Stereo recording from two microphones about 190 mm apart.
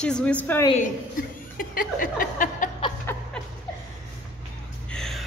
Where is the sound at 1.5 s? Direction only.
50° left (ahead or behind).